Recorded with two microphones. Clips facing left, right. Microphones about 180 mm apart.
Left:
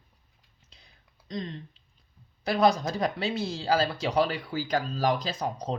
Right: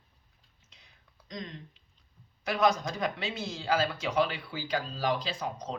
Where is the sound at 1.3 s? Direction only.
30° left (ahead or behind).